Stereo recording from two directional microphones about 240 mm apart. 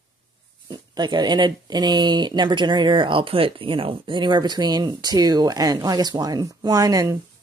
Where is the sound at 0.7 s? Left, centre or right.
Centre.